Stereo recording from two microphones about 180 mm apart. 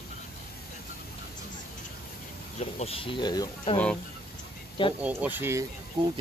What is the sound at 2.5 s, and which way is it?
Speech, 35° left (ahead or behind).